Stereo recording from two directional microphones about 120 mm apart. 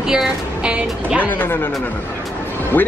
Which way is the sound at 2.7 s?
15° left (ahead or behind).